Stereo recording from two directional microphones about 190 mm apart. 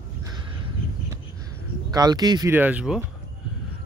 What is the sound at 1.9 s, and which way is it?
Speech, 20° right (ahead or behind).